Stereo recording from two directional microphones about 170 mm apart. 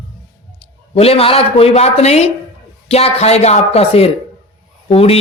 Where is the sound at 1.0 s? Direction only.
35° left (ahead or behind).